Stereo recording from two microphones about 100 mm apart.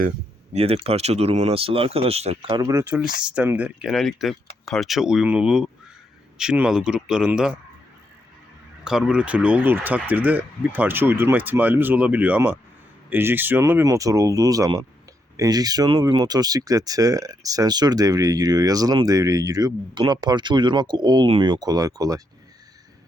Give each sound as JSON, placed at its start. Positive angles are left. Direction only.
{"t": 0.5, "sound": "speech", "side_deg": -80}
{"t": 2.5, "sound": "speech", "side_deg": -35}
{"t": 2.9, "sound": "speech", "side_deg": -10}
{"t": 3.8, "sound": "speech", "side_deg": 0}
{"t": 8.8, "sound": "speech", "side_deg": -5}
{"t": 13.8, "sound": "speech", "side_deg": -35}